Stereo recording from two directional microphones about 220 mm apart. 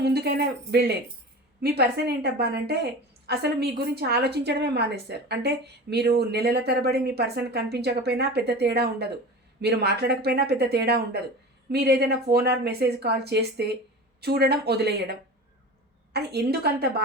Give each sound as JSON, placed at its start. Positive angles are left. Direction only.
{"t": 0.0, "sound": "a woman's voice", "side_deg": -45}
{"t": 16.1, "sound": "a woman's voice", "side_deg": -45}